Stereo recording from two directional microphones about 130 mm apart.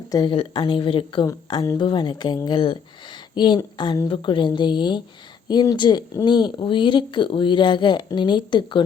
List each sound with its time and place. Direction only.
0.1 s speech: 30° left (ahead or behind)